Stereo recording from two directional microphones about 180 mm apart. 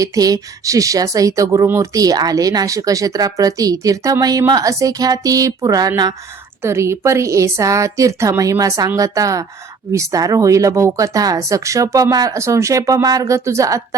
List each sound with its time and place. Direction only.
0.0 s speech: 20° right (ahead or behind)